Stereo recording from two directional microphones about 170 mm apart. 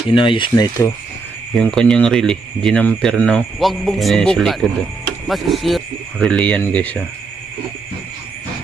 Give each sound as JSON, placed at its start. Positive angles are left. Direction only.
{"t": 0.1, "sound": "speech", "side_deg": 30}
{"t": 1.5, "sound": "speech", "side_deg": 5}